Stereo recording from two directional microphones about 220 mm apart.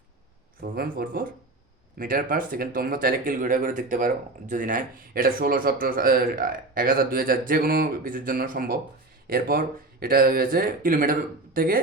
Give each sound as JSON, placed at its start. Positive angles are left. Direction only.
{"t": 0.6, "sound": "speech", "side_deg": -45}